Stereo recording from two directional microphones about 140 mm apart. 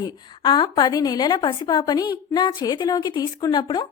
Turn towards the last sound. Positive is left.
turn(degrees=35)  # may be behind; listen again after turning